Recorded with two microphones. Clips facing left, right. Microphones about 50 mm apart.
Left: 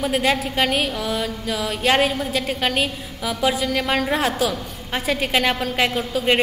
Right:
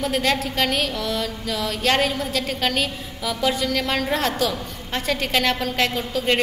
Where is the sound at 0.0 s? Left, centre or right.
Centre.